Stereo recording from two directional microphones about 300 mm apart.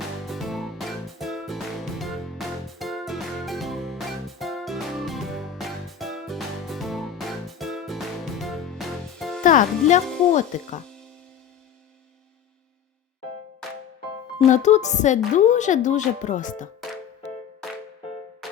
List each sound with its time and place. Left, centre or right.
0.3 s music: centre
9.4 s speech: left
14.3 s speech: left